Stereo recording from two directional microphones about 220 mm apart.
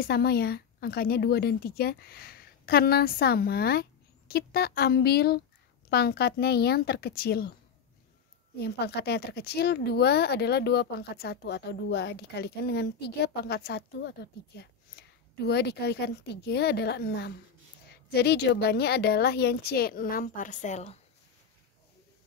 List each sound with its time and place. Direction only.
0.0 s speech: 45° left (ahead or behind)
8.5 s speech: 45° left (ahead or behind); by 21.0 s 30° left (ahead or behind)